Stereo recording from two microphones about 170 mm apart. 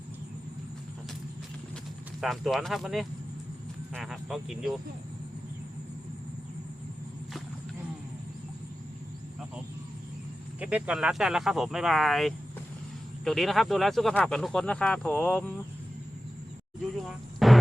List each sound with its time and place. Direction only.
2.2 s speech: centre (ahead or behind)
3.9 s vehicle: centre (ahead or behind)
10.6 s speech: 10° right (ahead or behind)
17.0 s a sound: centre (ahead or behind)